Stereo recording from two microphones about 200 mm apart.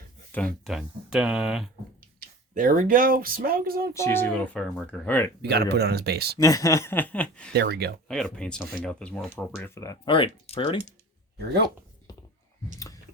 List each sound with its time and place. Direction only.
0.3 s speech: 5° left (ahead or behind)
2.6 s speech: 45° right (ahead or behind)
3.9 s speech: 10° left (ahead or behind)
5.4 s speech: 55° right (ahead or behind)
6.3 s speech: 15° left (ahead or behind)
7.5 s speech: 55° right (ahead or behind)
8.0 s speech: 5° left (ahead or behind); by 10.9 s 30° left (ahead or behind)
11.3 s speech: 55° right (ahead or behind)